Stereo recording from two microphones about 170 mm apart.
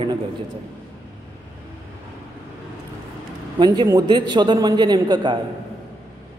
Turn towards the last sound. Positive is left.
turn(degrees=-25)  # may be behind; listen again after turning